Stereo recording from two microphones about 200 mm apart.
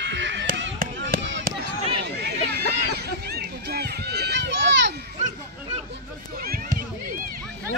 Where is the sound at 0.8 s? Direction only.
45° right (ahead or behind).